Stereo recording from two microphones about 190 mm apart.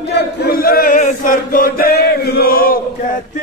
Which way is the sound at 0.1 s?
50° left (ahead or behind).